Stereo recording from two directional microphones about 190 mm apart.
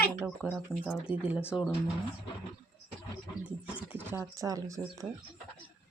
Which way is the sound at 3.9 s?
10° right (ahead or behind).